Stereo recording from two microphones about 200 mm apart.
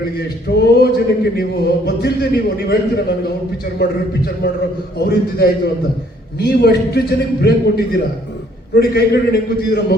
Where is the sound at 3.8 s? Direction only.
55° left (ahead or behind).